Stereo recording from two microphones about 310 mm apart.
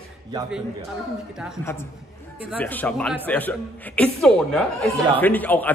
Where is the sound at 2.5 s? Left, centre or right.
Centre.